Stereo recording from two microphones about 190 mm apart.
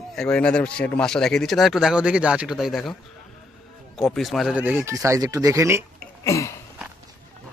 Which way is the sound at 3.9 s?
Centre (ahead or behind).